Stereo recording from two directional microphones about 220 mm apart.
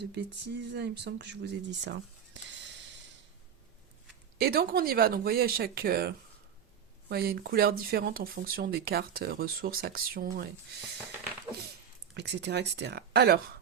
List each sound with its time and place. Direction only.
0.1 s speech: 50° right (ahead or behind)
4.4 s speech: 45° right (ahead or behind)
12.1 s speech: 50° right (ahead or behind)